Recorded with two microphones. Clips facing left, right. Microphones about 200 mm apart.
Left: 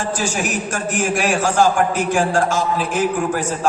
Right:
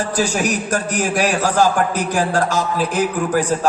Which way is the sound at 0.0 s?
40° right (ahead or behind).